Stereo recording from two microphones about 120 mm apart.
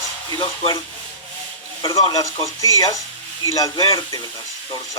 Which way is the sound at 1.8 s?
40° left (ahead or behind).